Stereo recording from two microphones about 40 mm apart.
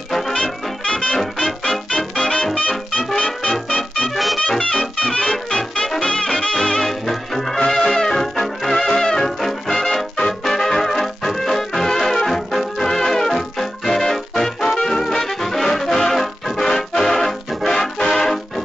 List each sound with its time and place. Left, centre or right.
0.1 s brass instrument: centre
0.4 s music: left
4.1 s music: centre
4.5 s music: centre
17.7 s music: centre